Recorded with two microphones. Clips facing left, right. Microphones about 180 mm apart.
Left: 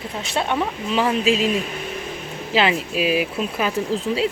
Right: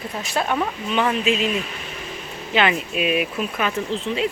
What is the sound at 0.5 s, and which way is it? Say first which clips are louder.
Speech: left 2 dB; 5° left (ahead or behind).